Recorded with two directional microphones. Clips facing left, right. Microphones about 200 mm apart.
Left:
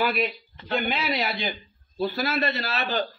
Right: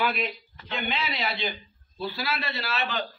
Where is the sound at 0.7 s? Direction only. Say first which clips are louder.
Left 5 dB; 45° left (ahead or behind).